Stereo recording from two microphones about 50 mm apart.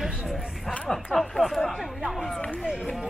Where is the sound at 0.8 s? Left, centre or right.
Centre.